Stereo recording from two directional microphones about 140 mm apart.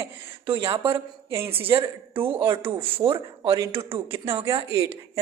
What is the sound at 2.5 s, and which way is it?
Speech, 40° right (ahead or behind).